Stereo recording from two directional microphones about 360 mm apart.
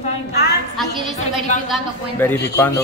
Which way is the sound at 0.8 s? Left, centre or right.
Centre.